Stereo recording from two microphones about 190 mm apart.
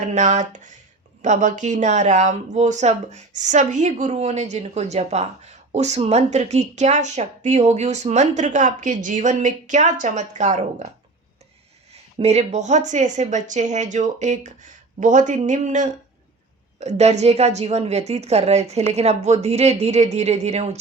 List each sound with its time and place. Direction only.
0.0 s speech: 40° right (ahead or behind)